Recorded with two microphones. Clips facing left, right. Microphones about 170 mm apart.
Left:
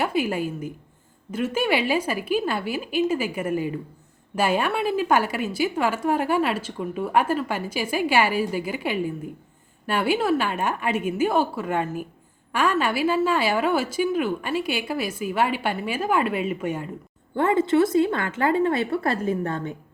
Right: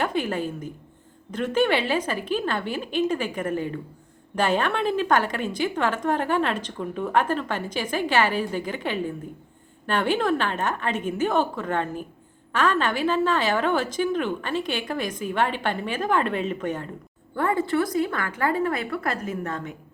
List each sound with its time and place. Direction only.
0.0 s a woman's voice: 10° left (ahead or behind)
17.3 s a woman's voice: 20° left (ahead or behind)